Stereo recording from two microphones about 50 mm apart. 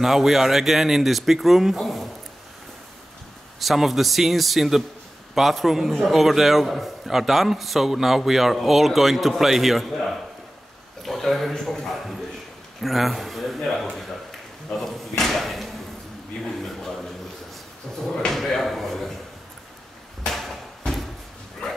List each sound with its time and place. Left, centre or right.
0.0 s a man's voice: centre
3.5 s a man's voice: centre
11.0 s a sound: centre
18.0 s drawer open or close: centre
18.4 s a sound: centre
20.9 s slam: centre